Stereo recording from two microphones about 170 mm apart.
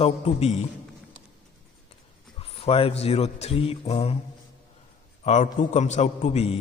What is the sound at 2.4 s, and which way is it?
A man's voice, 35° left (ahead or behind).